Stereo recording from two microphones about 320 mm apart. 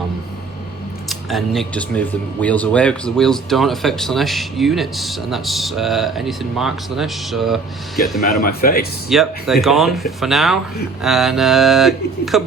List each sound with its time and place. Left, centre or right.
1.3 s speech: centre
8.3 s speech: left
9.0 s speech: centre